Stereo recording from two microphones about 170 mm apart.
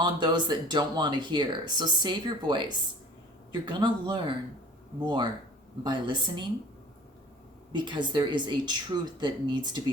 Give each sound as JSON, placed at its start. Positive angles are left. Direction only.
{"t": 0.0, "sound": "speech", "side_deg": -25}
{"t": 7.7, "sound": "speech", "side_deg": -25}